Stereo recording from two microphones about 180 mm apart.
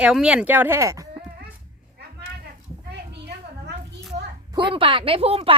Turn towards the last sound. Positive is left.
turn(degrees=-35)  # may be behind; listen again after turning